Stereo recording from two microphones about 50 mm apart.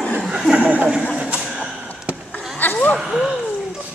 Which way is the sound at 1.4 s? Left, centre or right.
Centre.